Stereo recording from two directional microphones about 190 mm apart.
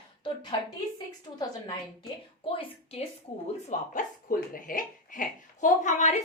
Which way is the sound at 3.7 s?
45° left (ahead or behind).